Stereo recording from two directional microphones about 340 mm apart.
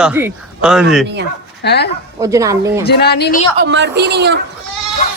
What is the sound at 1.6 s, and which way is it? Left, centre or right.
Speech, left.